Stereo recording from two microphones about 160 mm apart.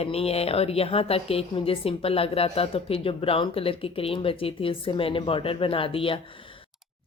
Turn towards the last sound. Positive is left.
turn(degrees=35)  # may be behind; listen again after turning